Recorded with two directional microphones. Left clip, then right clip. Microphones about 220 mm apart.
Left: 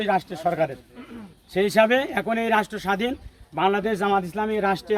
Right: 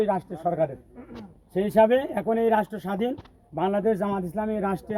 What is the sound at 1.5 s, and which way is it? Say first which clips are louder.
A man's voice: left 1 dB; 25° right (ahead or behind).